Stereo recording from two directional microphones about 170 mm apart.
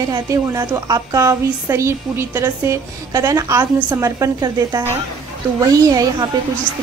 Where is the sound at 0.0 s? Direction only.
20° right (ahead or behind).